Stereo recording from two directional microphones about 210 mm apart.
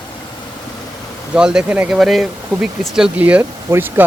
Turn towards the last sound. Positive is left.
turn(degrees=-10)  # may be behind; listen again after turning